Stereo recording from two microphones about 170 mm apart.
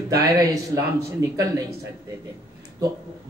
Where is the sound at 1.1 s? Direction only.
20° right (ahead or behind).